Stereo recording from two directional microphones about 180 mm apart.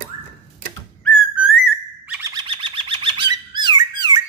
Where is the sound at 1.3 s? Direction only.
5° right (ahead or behind).